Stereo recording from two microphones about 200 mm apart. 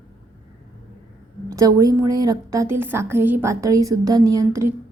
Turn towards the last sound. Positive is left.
turn(degrees=-15)  # may be behind; listen again after turning